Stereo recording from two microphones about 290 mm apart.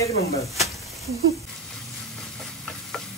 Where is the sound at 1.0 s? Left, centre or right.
Centre.